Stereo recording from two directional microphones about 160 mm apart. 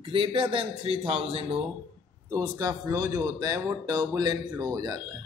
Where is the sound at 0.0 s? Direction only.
35° right (ahead or behind).